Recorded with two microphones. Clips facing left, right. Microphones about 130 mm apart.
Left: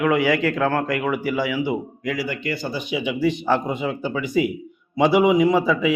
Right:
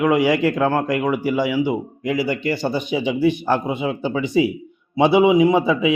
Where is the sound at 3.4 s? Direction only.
15° right (ahead or behind).